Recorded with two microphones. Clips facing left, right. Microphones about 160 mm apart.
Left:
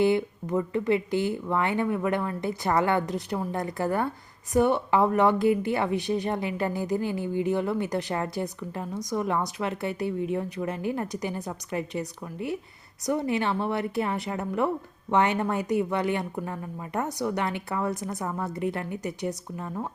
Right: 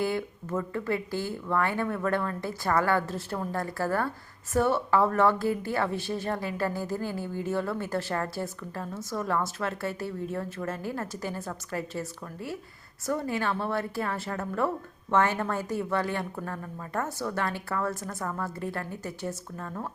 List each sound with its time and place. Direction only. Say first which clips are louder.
0.0 s a woman's voice: left 6 dB; 20° left (ahead or behind)